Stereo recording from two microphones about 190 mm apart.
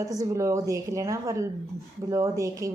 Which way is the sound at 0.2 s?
15° right (ahead or behind).